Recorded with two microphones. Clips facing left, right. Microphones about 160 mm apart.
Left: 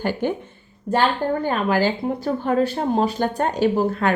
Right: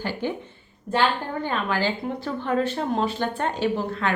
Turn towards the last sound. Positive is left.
turn(degrees=40)  # may be behind; listen again after turning